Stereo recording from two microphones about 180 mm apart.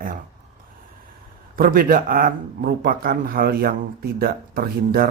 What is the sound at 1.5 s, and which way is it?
Speech, 50° right (ahead or behind).